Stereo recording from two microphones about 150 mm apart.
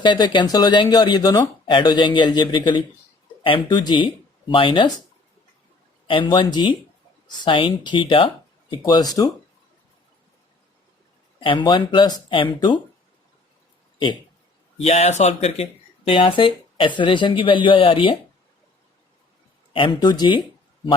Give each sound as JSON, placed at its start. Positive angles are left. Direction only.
{"t": 0.0, "sound": "speech", "side_deg": 30}
{"t": 6.1, "sound": "speech", "side_deg": 35}
{"t": 11.3, "sound": "speech", "side_deg": 30}
{"t": 14.8, "sound": "speech", "side_deg": 45}
{"t": 16.0, "sound": "speech", "side_deg": 35}
{"t": 19.7, "sound": "speech", "side_deg": 35}